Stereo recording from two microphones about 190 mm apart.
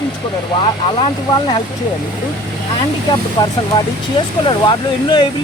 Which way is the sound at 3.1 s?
20° left (ahead or behind).